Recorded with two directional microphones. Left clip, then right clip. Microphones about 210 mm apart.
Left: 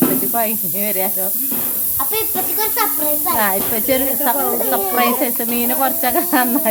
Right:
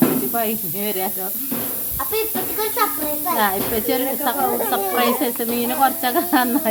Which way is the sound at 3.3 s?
15° left (ahead or behind).